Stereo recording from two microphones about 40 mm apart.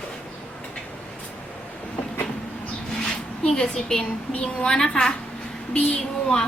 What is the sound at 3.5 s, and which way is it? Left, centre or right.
A woman's voice, centre.